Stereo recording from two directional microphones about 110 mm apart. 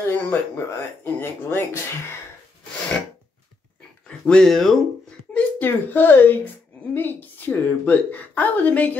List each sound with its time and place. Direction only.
0.0 s a sound: 25° left (ahead or behind)
1.0 s speech: 20° left (ahead or behind)
4.3 s speech: 5° left (ahead or behind)
5.3 s a child's voice: 15° left (ahead or behind)